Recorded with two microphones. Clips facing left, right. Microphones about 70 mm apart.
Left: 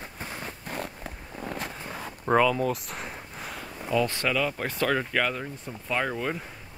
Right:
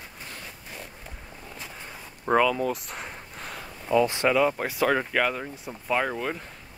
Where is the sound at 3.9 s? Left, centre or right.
Centre.